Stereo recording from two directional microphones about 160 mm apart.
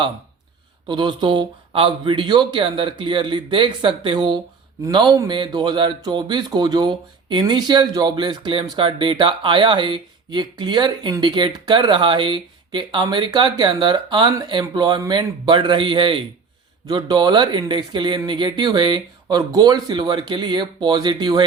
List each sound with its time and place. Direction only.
0.9 s speech: 30° right (ahead or behind)